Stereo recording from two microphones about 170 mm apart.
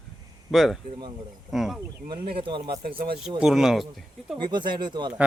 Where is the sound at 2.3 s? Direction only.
30° right (ahead or behind).